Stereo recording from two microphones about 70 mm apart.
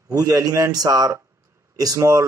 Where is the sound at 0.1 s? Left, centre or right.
Right.